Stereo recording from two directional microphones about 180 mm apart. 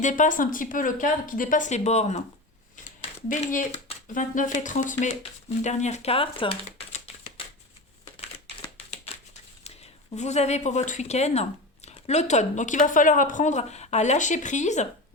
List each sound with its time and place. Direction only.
0.0 s speech: 45° left (ahead or behind)
8.9 s speech: 35° left (ahead or behind)